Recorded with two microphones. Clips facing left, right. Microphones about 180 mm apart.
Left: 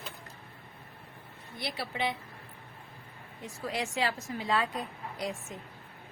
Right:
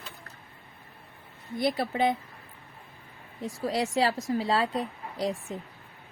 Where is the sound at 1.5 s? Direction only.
50° right (ahead or behind).